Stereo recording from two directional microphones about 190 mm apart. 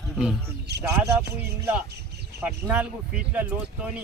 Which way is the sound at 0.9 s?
15° right (ahead or behind).